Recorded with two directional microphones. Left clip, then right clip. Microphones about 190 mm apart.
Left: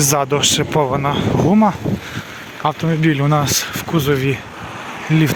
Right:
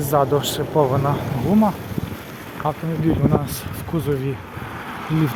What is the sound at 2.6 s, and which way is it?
Speech, 20° left (ahead or behind).